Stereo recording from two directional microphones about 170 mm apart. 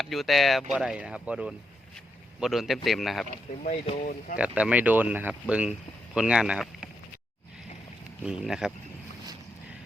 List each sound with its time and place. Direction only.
0.0 s a man's voice: centre (ahead or behind)
3.6 s speech: 45° left (ahead or behind)
4.4 s a man's voice: 5° right (ahead or behind)
8.2 s a man's voice: 5° right (ahead or behind)